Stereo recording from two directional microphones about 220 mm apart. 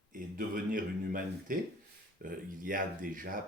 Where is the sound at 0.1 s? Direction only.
40° right (ahead or behind).